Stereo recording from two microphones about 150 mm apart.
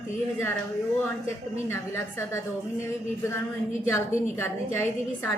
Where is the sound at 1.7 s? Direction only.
15° left (ahead or behind).